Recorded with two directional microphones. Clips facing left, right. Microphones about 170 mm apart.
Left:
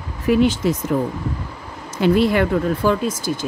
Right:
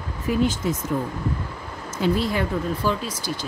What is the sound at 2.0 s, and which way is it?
Speech, 70° left (ahead or behind).